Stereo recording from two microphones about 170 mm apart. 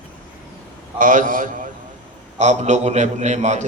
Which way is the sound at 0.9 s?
50° right (ahead or behind).